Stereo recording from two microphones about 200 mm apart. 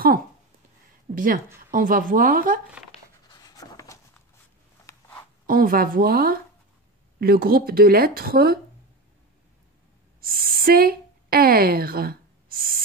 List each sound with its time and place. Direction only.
1.1 s a woman's voice: 45° right (ahead or behind)
3.3 s writing: 20° left (ahead or behind)
5.5 s a woman's voice: 45° right (ahead or behind)
10.2 s speech: 45° right (ahead or behind)